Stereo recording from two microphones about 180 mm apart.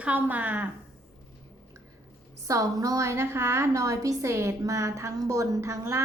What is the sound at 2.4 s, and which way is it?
A woman's voice, 20° right (ahead or behind).